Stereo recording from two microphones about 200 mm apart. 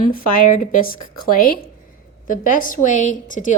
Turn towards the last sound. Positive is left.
turn(degrees=40)  # may be behind; listen again after turning